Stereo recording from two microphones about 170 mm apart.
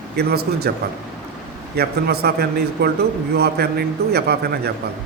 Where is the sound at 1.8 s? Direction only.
70° right (ahead or behind).